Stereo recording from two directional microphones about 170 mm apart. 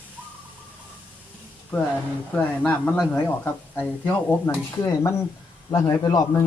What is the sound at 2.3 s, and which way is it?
Speech, 10° left (ahead or behind).